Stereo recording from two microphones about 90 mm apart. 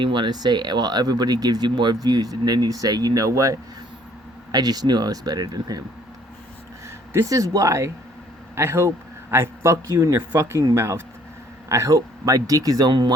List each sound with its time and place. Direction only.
0.0 s speech: 65° right (ahead or behind); by 3.6 s 35° right (ahead or behind)
4.5 s speech: 50° right (ahead or behind)
7.1 s speech: 35° right (ahead or behind); by 13.1 s 55° right (ahead or behind)